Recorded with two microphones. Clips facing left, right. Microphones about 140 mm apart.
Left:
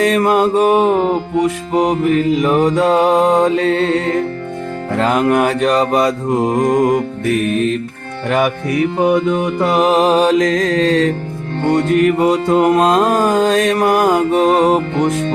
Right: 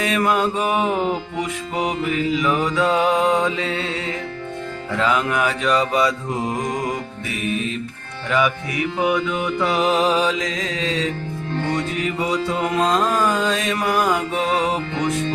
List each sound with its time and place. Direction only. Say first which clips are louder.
0.0 s music: left 7 dB; 40° left (ahead or behind)